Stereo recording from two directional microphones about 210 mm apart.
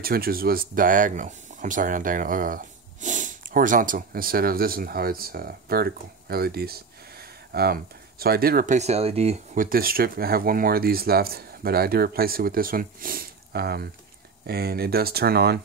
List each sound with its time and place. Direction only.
0.0 s speech: 45° right (ahead or behind)